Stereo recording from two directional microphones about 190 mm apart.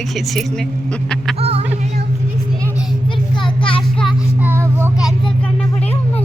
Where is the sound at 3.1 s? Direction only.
25° left (ahead or behind).